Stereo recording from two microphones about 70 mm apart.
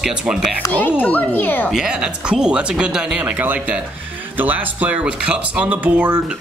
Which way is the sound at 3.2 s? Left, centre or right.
Right.